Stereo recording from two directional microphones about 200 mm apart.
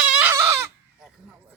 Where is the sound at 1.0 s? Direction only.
5° right (ahead or behind).